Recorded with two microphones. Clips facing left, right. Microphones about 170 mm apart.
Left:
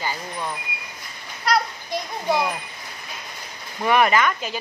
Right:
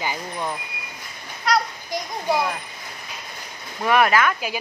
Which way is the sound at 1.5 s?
Centre (ahead or behind).